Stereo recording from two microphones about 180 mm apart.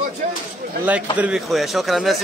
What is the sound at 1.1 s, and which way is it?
Speech, 5° right (ahead or behind).